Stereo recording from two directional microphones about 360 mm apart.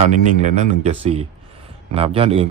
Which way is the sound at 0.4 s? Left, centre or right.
Centre.